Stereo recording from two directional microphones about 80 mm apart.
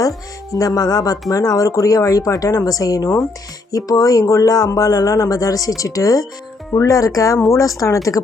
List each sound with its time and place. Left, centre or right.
0.5 s speech: left